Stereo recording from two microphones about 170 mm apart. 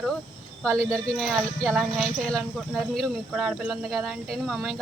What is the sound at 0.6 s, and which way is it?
Speech, 5° left (ahead or behind).